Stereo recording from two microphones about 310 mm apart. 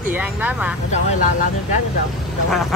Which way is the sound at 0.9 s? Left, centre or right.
Left.